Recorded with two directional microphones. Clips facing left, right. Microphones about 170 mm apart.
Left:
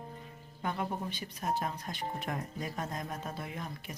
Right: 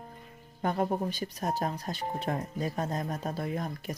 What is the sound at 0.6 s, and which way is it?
Speech, 40° right (ahead or behind).